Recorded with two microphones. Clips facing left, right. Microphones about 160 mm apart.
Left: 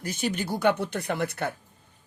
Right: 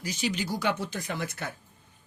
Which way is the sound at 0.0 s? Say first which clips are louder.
Left 2 dB; 55° left (ahead or behind).